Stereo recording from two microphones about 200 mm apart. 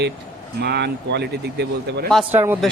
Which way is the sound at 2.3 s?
10° right (ahead or behind).